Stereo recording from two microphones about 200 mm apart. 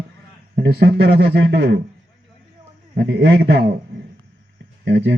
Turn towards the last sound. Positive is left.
turn(degrees=-60)  # may be behind; listen again after turning